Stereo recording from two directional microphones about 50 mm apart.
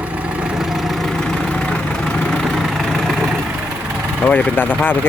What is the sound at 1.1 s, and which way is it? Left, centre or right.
Vehicle, centre.